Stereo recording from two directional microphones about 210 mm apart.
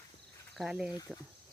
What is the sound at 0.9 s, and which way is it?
Speech, 20° left (ahead or behind).